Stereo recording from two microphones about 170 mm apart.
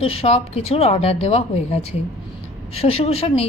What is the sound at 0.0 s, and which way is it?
A woman's voice, 35° left (ahead or behind).